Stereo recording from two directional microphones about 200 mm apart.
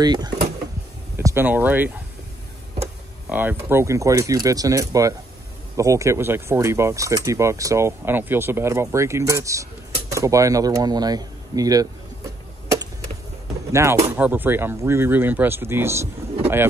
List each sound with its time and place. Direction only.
0.0 s speech: 20° right (ahead or behind)
3.3 s speech: 10° right (ahead or behind)
13.7 s speech: 15° right (ahead or behind)